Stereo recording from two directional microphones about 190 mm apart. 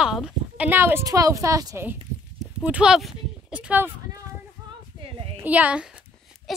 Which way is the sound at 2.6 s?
5° right (ahead or behind).